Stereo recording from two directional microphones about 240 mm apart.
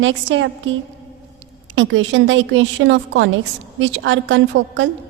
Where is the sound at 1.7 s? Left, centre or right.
Right.